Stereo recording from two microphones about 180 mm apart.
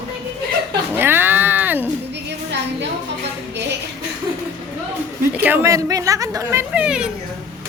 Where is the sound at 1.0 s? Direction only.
10° right (ahead or behind).